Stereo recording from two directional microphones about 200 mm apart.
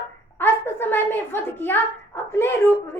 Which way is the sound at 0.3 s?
10° left (ahead or behind).